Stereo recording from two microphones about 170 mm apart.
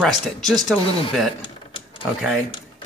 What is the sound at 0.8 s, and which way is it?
Speech, 30° left (ahead or behind).